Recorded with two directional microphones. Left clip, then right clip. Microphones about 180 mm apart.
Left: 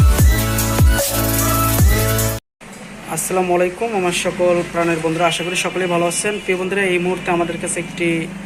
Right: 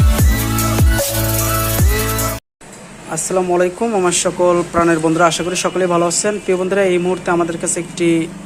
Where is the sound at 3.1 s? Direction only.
25° right (ahead or behind).